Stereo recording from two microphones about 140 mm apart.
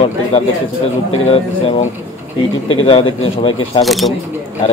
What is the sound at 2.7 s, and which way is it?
Speech, 40° left (ahead or behind).